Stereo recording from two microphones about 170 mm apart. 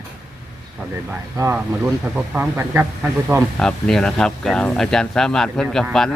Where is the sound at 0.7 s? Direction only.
15° right (ahead or behind).